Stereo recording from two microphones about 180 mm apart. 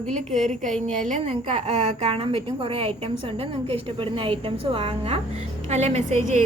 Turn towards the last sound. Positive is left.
turn(degrees=-40)  # may be behind; listen again after turning